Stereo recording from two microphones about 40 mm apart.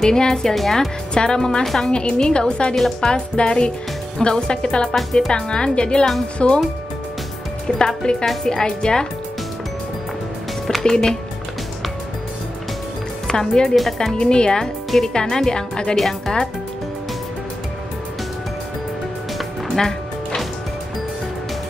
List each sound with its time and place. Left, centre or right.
0.0 s a woman's voice: centre
1.6 s speech: centre
1.9 s a woman's voice: left
7.6 s speech: centre
10.8 s speech: centre
13.3 s a woman's voice: centre
19.3 s music: centre